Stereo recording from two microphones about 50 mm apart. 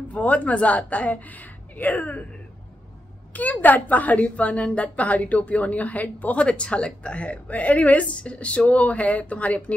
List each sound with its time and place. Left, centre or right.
0.1 s a woman's voice: left
3.3 s a woman's voice: left